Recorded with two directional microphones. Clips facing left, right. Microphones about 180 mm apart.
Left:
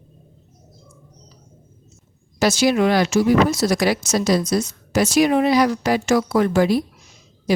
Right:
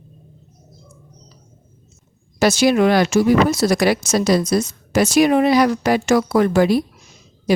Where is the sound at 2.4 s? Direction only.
55° right (ahead or behind).